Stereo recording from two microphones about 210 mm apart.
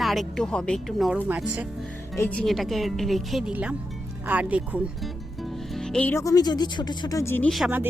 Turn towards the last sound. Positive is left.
turn(degrees=-5)  # may be behind; listen again after turning